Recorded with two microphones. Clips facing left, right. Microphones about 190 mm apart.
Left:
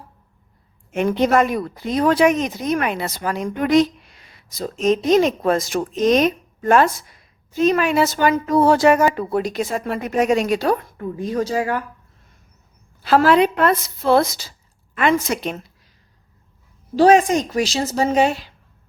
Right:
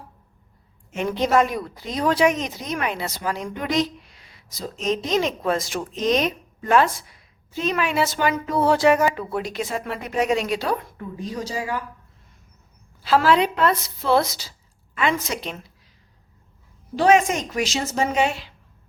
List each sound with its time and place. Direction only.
0.9 s a woman's voice: 55° left (ahead or behind)
13.0 s speech: 50° left (ahead or behind)
16.9 s speech: 35° left (ahead or behind)